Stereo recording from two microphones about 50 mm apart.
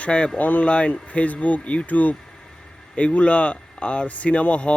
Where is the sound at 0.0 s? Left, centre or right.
Left.